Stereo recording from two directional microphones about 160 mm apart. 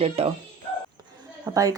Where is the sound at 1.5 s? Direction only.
20° right (ahead or behind).